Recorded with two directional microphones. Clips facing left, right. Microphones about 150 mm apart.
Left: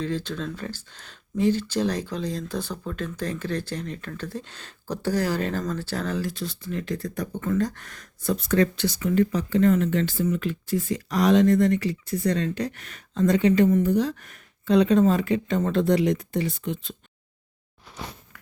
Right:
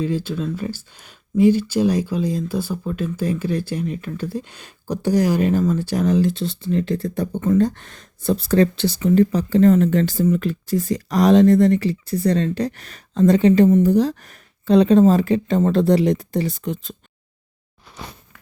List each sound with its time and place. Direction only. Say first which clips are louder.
0.0 s speech: right 6 dB; 10° right (ahead or behind)
13.8 s speech: right 6 dB; 35° right (ahead or behind)